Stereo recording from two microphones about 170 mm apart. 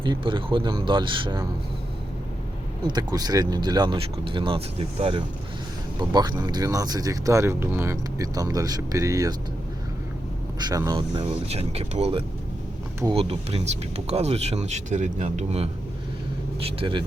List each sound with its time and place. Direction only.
0.0 s speech: 30° right (ahead or behind)
2.8 s speech: 25° right (ahead or behind)
10.6 s speech: 20° right (ahead or behind)
11.1 s speech: 35° right (ahead or behind)